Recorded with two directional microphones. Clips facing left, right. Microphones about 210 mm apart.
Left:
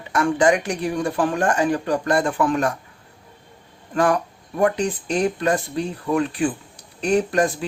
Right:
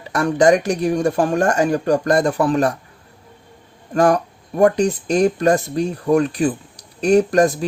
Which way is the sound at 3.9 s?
40° right (ahead or behind).